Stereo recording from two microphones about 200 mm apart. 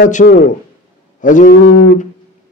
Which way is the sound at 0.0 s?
45° left (ahead or behind).